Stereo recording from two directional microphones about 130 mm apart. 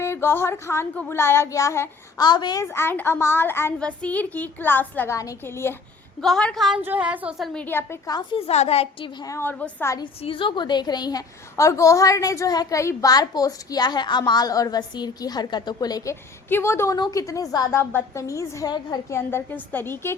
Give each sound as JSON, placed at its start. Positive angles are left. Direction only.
{"t": 0.0, "sound": "a woman's voice", "side_deg": 20}
{"t": 2.1, "sound": "a woman's voice", "side_deg": 35}
{"t": 2.7, "sound": "a woman's voice", "side_deg": 15}
{"t": 6.2, "sound": "a woman's voice", "side_deg": 5}
{"t": 6.8, "sound": "a woman's voice", "side_deg": -10}
{"t": 7.6, "sound": "a woman's voice", "side_deg": 15}
{"t": 8.1, "sound": "a woman's voice", "side_deg": 40}
{"t": 9.2, "sound": "a woman's voice", "side_deg": 20}
{"t": 10.2, "sound": "a woman's voice", "side_deg": 40}
{"t": 16.5, "sound": "a woman's voice", "side_deg": 20}
{"t": 19.7, "sound": "speech", "side_deg": 15}